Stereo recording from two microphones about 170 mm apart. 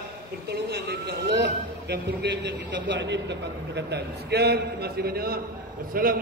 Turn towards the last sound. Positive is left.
turn(degrees=-60)  # may be behind; listen again after turning